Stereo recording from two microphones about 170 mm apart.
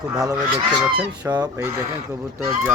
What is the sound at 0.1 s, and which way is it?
Speech, 20° right (ahead or behind).